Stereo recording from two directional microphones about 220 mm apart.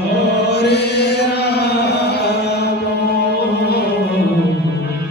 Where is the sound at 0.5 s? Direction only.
50° left (ahead or behind).